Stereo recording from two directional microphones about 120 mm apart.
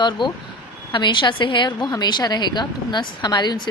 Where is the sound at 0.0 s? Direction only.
40° left (ahead or behind).